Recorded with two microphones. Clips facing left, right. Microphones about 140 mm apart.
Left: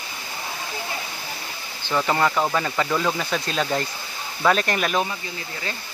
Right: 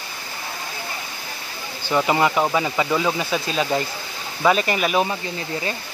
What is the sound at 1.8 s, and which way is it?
Speech, 10° right (ahead or behind).